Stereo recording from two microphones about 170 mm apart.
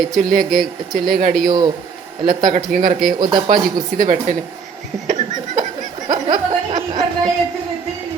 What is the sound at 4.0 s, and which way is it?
Speech, 45° right (ahead or behind).